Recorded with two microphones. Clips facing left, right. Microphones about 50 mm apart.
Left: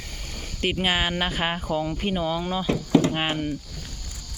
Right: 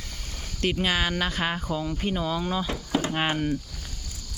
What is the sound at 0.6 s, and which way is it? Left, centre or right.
Speech, left.